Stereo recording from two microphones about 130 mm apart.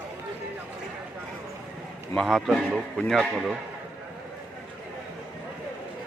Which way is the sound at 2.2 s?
Centre (ahead or behind).